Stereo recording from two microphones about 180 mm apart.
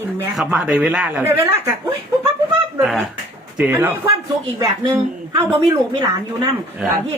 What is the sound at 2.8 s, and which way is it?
A man's voice, centre (ahead or behind).